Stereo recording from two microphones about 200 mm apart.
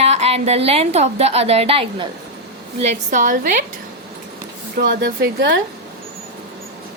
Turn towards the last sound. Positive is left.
turn(degrees=-50)  # may be behind; listen again after turning